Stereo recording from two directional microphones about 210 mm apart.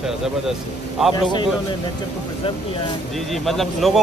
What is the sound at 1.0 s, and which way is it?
Speech, 5° right (ahead or behind).